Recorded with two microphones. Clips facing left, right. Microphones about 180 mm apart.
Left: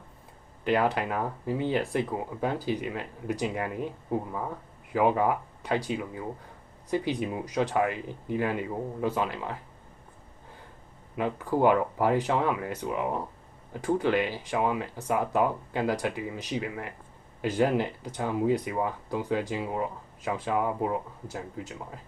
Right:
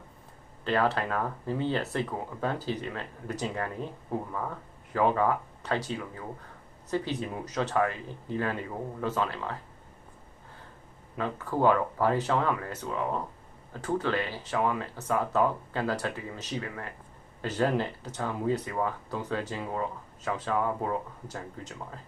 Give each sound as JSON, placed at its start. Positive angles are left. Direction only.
{"t": 0.6, "sound": "speech", "side_deg": 15}
{"t": 11.2, "sound": "speech", "side_deg": 15}